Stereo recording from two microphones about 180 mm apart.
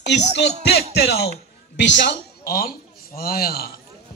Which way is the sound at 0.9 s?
65° left (ahead or behind).